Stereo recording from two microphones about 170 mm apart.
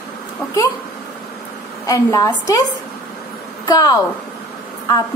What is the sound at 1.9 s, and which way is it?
Speech, 20° left (ahead or behind).